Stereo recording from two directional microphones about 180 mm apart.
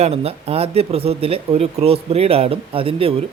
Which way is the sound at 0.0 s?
35° right (ahead or behind).